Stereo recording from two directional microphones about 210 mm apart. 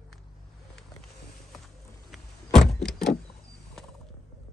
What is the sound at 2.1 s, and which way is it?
Power windows, centre (ahead or behind).